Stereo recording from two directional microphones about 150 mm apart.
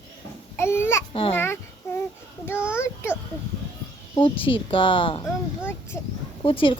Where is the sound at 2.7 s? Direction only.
15° left (ahead or behind).